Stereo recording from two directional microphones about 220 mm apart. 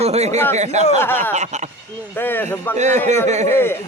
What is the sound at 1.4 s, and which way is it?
Speech, 30° right (ahead or behind).